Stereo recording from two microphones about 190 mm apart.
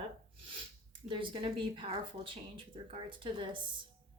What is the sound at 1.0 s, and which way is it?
Speech, 25° right (ahead or behind).